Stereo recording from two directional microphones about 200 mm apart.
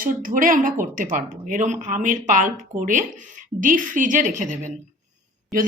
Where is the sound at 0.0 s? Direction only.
45° right (ahead or behind).